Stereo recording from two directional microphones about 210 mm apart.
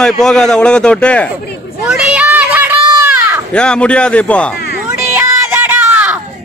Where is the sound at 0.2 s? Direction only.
5° left (ahead or behind).